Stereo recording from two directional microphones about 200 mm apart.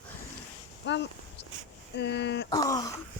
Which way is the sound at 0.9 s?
60° left (ahead or behind).